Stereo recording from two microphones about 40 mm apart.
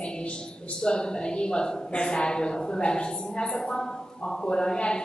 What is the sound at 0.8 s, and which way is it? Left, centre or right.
A woman's voice, left.